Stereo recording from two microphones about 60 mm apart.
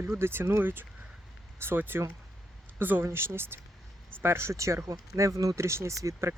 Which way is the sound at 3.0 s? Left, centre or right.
Right.